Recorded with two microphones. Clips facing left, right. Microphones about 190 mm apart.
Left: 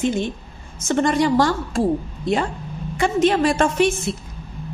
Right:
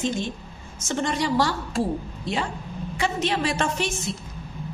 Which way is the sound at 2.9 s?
50° left (ahead or behind).